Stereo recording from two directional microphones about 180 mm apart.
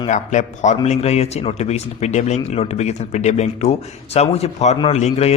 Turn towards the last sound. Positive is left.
turn(degrees=35)  # may be behind; listen again after turning